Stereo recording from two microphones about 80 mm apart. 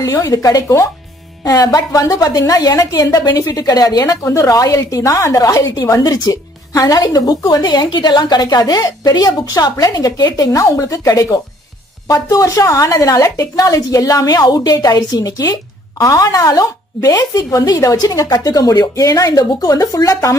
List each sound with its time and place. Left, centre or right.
0.1 s a woman's voice: left
7.0 s a woman's voice: left